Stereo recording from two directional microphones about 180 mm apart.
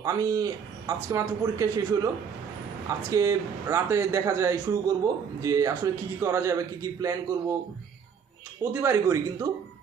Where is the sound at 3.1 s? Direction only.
20° right (ahead or behind).